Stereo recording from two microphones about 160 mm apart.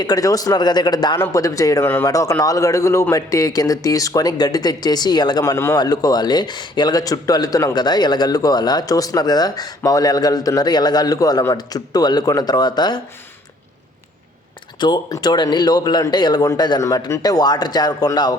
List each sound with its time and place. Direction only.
0.0 s speech: 25° left (ahead or behind)
14.8 s speech: 25° left (ahead or behind)